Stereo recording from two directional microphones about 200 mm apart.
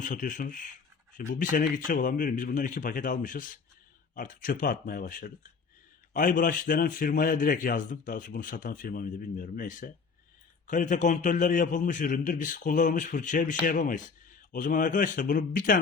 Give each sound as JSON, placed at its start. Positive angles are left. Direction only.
{"t": 0.0, "sound": "a man's voice", "side_deg": 40}